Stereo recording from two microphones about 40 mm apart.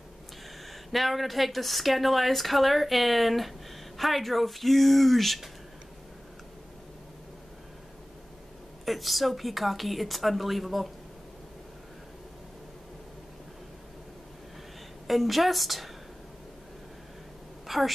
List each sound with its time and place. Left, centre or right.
0.9 s speech: centre
8.8 s speech: centre
15.0 s speech: centre
17.6 s a sound: centre